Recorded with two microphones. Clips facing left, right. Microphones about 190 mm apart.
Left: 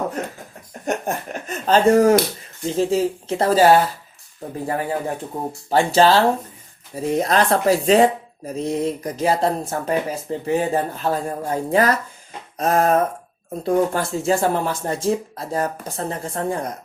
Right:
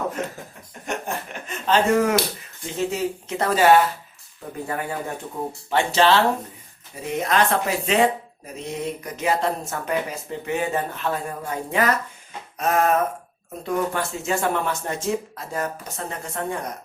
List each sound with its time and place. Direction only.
0.9 s speech: 40° left (ahead or behind)
12.5 s a sound: 35° left (ahead or behind)
13.7 s speech: 35° left (ahead or behind)